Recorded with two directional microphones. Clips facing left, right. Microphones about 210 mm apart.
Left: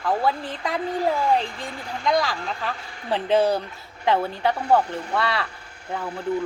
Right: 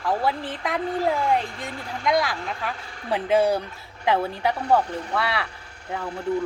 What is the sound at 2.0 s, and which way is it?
Speech, 10° right (ahead or behind).